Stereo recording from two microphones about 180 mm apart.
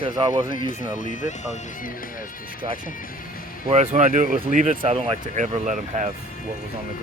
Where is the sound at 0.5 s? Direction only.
45° left (ahead or behind).